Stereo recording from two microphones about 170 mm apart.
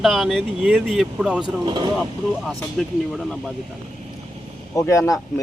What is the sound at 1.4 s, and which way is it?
Speech, 25° right (ahead or behind).